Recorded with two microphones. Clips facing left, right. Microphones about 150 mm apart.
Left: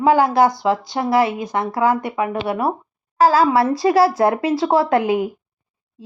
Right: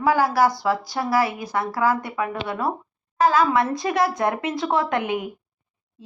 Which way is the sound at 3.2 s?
35° left (ahead or behind).